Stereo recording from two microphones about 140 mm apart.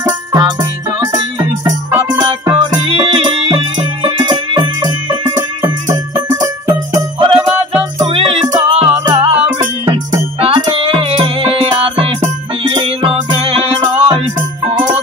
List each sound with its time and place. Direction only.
0.3 s music: 30° right (ahead or behind)
10.4 s music: 40° right (ahead or behind)